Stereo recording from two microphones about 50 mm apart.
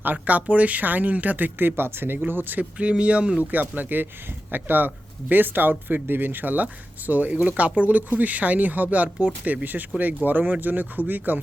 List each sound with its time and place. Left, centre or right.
0.0 s speech: right
2.7 s speech: right
3.5 s speech: right
10.2 s speech: right